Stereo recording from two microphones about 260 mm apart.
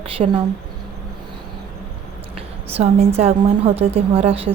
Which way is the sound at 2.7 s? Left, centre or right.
Right.